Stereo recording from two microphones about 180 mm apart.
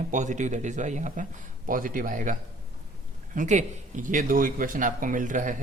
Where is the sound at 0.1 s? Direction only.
40° right (ahead or behind).